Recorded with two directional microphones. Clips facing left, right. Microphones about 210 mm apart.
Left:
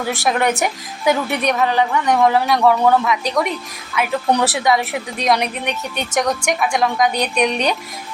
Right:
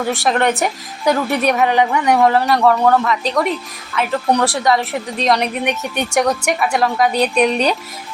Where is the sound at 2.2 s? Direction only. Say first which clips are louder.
Even; centre (ahead or behind).